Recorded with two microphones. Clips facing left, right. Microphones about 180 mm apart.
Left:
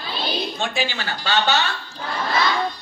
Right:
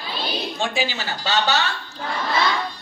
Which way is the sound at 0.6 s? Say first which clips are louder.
Right 1 dB; 5° right (ahead or behind).